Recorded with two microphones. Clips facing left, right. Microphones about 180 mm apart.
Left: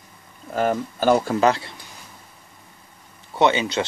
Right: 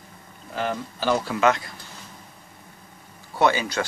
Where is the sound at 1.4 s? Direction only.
30° left (ahead or behind).